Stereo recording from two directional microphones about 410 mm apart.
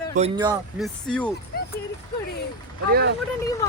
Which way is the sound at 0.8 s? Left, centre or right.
Centre.